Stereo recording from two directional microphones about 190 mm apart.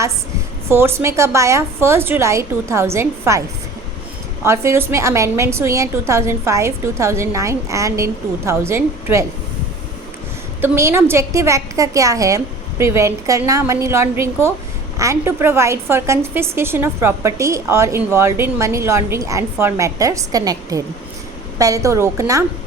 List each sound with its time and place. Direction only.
0.7 s a woman's voice: 10° right (ahead or behind)
4.4 s a woman's voice: 15° right (ahead or behind)
10.6 s a woman's voice: 15° right (ahead or behind)